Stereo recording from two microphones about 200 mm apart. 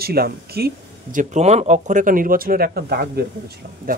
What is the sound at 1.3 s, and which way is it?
Speech, 35° right (ahead or behind).